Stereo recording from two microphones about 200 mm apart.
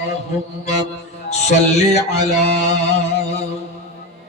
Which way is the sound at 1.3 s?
35° left (ahead or behind).